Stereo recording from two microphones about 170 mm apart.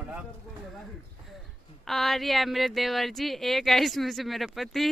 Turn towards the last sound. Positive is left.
turn(degrees=0)  # may be behind; listen again after turning